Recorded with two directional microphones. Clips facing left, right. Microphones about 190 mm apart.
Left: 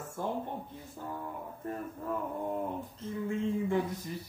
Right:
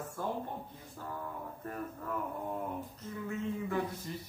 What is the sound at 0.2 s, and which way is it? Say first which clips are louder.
Speech: left 3 dB; 20° left (ahead or behind).